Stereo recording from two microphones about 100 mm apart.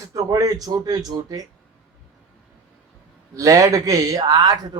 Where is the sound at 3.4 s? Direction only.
30° right (ahead or behind).